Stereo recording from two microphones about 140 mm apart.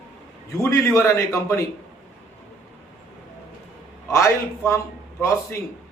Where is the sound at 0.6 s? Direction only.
20° left (ahead or behind).